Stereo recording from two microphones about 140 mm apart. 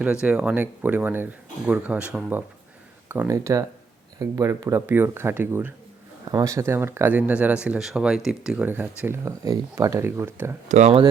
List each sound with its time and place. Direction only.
0.0 s speech: 5° right (ahead or behind); by 4.8 s 25° right (ahead or behind)
4.9 s speech: 15° right (ahead or behind)
10.7 s speech: 55° right (ahead or behind)